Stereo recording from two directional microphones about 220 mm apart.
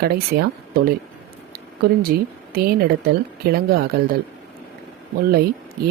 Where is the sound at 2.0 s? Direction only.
45° right (ahead or behind).